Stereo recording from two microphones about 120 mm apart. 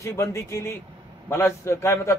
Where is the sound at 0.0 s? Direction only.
25° left (ahead or behind).